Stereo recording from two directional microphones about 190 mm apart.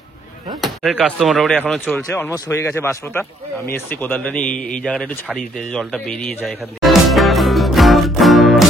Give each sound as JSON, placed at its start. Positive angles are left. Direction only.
{"t": 0.6, "sound": "speech", "side_deg": 0}